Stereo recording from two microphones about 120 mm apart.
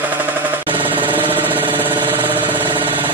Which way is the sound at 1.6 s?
40° right (ahead or behind).